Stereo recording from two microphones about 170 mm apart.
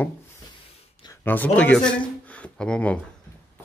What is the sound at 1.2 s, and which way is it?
Speech, 10° left (ahead or behind).